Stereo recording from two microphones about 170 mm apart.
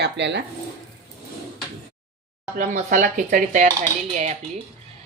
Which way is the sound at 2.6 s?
50° right (ahead or behind).